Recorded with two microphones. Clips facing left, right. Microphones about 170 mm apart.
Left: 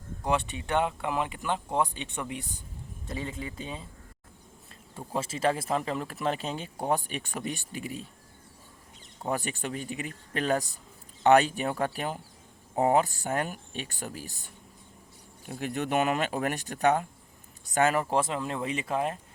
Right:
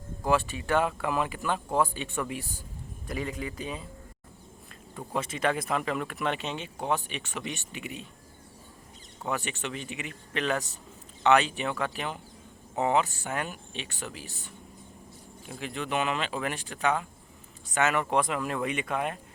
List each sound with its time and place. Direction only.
0.3 s speech: 20° left (ahead or behind)
4.9 s speech: 30° left (ahead or behind)
9.2 s speech: 40° left (ahead or behind)